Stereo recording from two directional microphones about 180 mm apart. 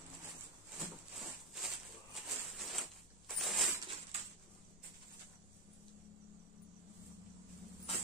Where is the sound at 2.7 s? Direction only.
Centre (ahead or behind).